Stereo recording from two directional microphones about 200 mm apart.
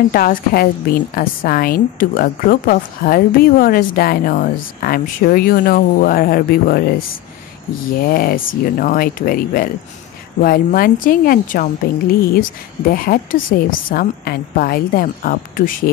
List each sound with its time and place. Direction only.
0.1 s a woman's voice: 45° left (ahead or behind)
8.0 s a woman's voice: 50° left (ahead or behind)